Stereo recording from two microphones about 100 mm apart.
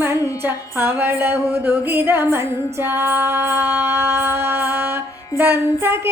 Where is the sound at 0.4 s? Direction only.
20° right (ahead or behind).